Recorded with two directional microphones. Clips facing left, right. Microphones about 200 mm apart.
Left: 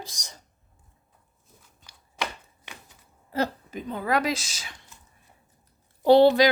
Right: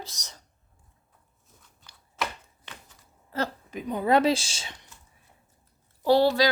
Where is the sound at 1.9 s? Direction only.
15° left (ahead or behind).